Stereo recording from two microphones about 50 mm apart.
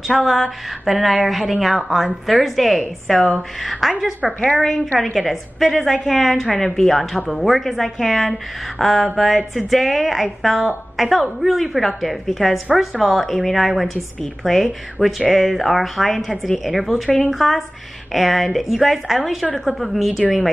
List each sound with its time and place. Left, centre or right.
0.1 s a woman's voice: centre
3.1 s speech: centre
3.8 s a woman's voice: centre